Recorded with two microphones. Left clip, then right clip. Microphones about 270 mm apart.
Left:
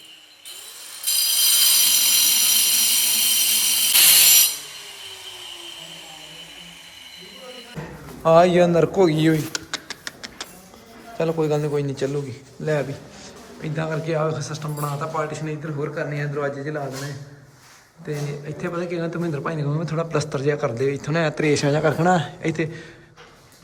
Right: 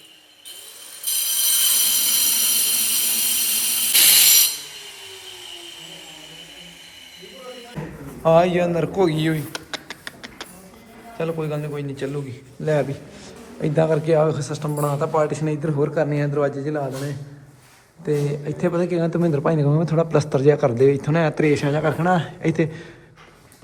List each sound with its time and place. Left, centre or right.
1.0 s a sound: centre
7.4 s fire alarm: centre
8.2 s speech: centre
9.5 s a sound: centre
11.2 s a man's voice: centre
13.6 s a man's voice: centre
18.1 s a man's voice: centre